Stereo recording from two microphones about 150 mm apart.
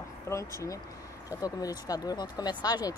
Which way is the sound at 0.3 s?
20° left (ahead or behind).